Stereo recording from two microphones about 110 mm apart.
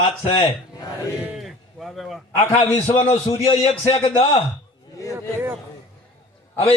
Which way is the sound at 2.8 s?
70° left (ahead or behind).